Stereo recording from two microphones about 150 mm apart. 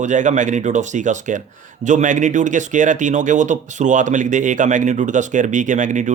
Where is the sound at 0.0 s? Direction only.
55° right (ahead or behind).